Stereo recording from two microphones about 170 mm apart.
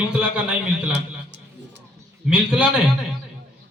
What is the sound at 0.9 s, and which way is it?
Music, 90° right.